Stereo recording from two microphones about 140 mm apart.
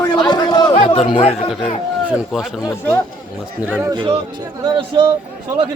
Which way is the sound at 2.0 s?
5° right (ahead or behind).